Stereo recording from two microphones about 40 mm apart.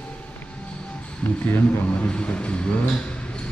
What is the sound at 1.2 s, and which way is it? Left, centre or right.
Speech, left.